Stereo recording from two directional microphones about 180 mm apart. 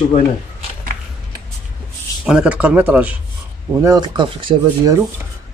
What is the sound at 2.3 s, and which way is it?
Speech, 5° right (ahead or behind).